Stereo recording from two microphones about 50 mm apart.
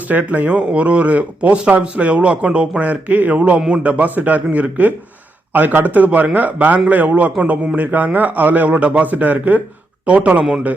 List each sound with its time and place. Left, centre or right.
0.1 s a man's voice: right